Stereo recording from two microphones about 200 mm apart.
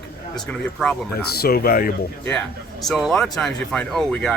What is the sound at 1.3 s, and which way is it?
Speech, 50° left (ahead or behind).